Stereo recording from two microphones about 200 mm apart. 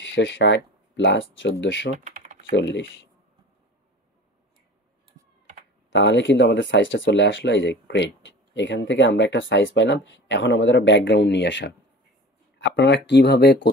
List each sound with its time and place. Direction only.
0.0 s speech: 60° left (ahead or behind)
2.0 s typing: 35° right (ahead or behind)
2.5 s speech: 60° left (ahead or behind)
5.9 s speech: 65° left (ahead or behind)